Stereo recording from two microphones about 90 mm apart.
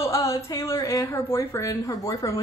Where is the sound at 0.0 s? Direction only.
35° left (ahead or behind).